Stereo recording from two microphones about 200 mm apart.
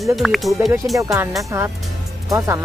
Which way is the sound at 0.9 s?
15° right (ahead or behind).